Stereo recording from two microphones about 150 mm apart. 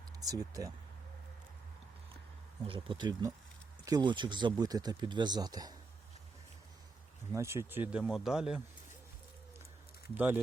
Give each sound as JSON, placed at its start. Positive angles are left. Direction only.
{"t": 0.2, "sound": "speech", "side_deg": -25}
{"t": 2.6, "sound": "speech", "side_deg": -35}
{"t": 7.3, "sound": "speech", "side_deg": -20}
{"t": 10.2, "sound": "speech", "side_deg": -10}